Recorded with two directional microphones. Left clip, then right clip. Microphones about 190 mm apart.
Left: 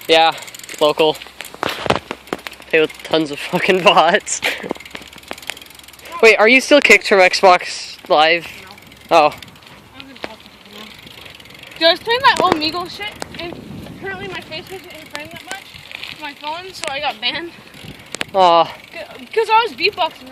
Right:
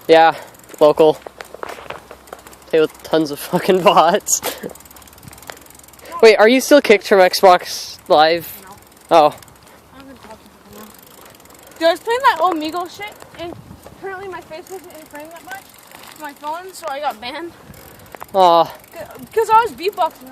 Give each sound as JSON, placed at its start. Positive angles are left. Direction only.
{"t": 0.1, "sound": "mechanisms", "side_deg": -40}
{"t": 2.6, "sound": "speech", "side_deg": -15}
{"t": 6.1, "sound": "speech", "side_deg": -15}
{"t": 9.0, "sound": "mechanisms", "side_deg": -10}
{"t": 11.8, "sound": "speech", "side_deg": 0}
{"t": 14.1, "sound": "speech", "side_deg": 10}
{"t": 16.0, "sound": "speech", "side_deg": 0}
{"t": 18.3, "sound": "speech", "side_deg": -10}
{"t": 18.9, "sound": "speech", "side_deg": 5}